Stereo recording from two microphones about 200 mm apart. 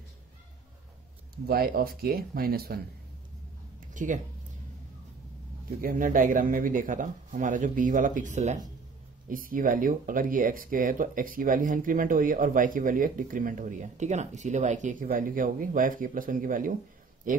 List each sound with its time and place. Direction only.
1.5 s speech: 50° right (ahead or behind)
3.9 s a sound: 40° right (ahead or behind)
5.8 s speech: 45° right (ahead or behind)